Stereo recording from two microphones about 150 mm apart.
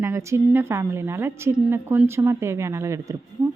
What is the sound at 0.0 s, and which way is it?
A woman's voice, 20° right (ahead or behind).